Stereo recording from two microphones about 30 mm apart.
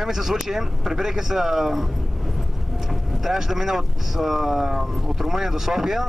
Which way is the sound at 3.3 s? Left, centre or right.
Centre.